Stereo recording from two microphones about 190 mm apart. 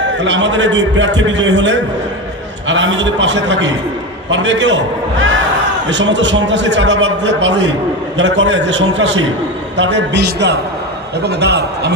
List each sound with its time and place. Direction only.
0.2 s a man's voice: 70° right (ahead or behind)
5.9 s a man's voice: 70° right (ahead or behind)